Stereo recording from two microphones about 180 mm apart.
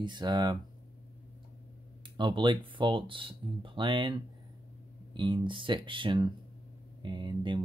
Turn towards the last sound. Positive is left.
turn(degrees=-25)  # may be behind; listen again after turning